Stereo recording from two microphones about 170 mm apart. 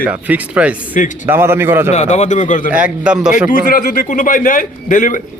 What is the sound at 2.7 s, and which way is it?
Speech, 5° right (ahead or behind).